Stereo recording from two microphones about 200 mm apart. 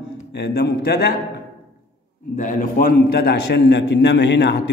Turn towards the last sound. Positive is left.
turn(degrees=60)  # may be behind; listen again after turning